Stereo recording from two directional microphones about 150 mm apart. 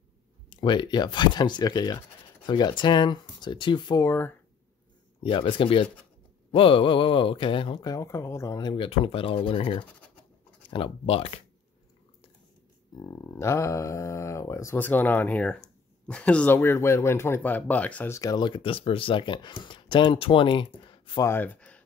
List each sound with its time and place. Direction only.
0.5 s speech: 30° left (ahead or behind)
4.0 s speech: 15° left (ahead or behind)
5.2 s speech: 35° left (ahead or behind)
12.9 s speech: 25° left (ahead or behind)
21.2 s speech: 15° left (ahead or behind)